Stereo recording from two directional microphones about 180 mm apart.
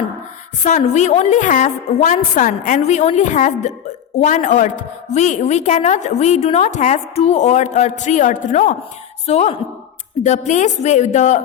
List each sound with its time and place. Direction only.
0.6 s a woman's voice: 40° left (ahead or behind)